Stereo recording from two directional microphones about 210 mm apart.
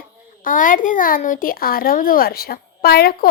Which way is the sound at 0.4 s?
40° left (ahead or behind).